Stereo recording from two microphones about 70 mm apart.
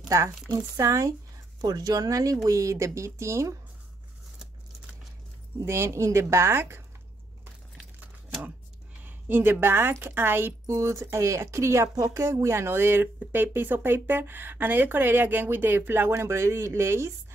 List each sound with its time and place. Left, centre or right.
0.5 s speech: right
1.6 s speech: right
5.6 s speech: right
9.0 s speech: right
10.7 s speech: right